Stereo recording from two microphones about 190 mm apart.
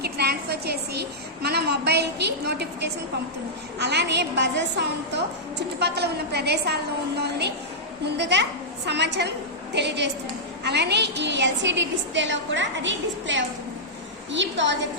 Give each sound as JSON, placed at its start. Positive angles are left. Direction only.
{"t": 0.0, "sound": "a woman's voice", "side_deg": -55}